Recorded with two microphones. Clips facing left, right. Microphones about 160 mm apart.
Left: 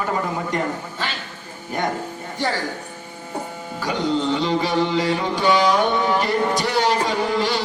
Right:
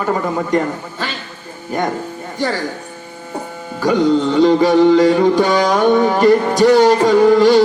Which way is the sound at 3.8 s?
45° right (ahead or behind).